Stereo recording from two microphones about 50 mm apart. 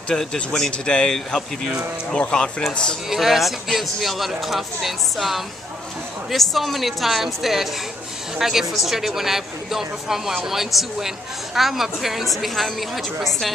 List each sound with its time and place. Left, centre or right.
0.1 s speech: centre
3.1 s speech: centre